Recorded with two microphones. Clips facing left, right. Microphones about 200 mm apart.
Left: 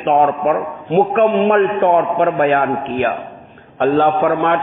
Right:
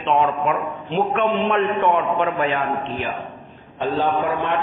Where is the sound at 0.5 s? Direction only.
45° left (ahead or behind).